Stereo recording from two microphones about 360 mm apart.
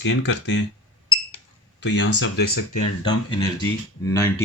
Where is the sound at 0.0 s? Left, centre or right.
Left.